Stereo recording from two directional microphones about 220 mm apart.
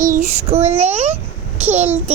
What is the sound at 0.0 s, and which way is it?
Child singing, 35° right (ahead or behind).